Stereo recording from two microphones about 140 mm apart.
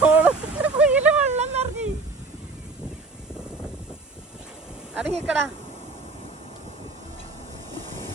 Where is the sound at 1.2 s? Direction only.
50° right (ahead or behind).